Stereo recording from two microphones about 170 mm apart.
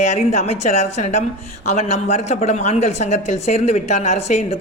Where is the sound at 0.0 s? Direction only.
40° left (ahead or behind).